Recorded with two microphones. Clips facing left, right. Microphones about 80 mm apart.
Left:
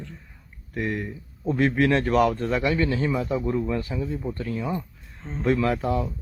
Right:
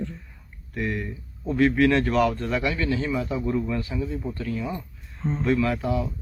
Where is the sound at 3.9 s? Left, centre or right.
Centre.